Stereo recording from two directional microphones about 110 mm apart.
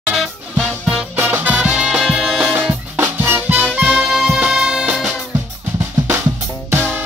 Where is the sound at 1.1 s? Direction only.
15° right (ahead or behind); by 2.5 s centre (ahead or behind).